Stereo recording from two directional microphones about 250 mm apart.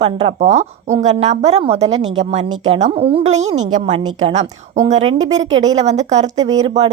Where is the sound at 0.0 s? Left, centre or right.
Right.